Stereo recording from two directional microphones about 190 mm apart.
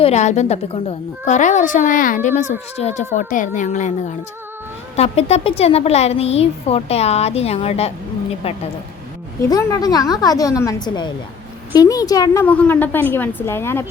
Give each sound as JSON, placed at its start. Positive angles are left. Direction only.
{"t": 0.0, "sound": "speech", "side_deg": 35}
{"t": 4.9, "sound": "speech", "side_deg": 35}
{"t": 9.4, "sound": "a woman's voice", "side_deg": 15}